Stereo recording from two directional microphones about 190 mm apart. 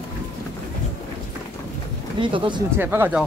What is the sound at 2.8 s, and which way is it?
Speech, 10° right (ahead or behind).